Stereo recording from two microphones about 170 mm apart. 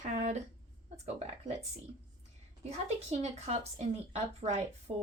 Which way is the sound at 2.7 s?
40° right (ahead or behind).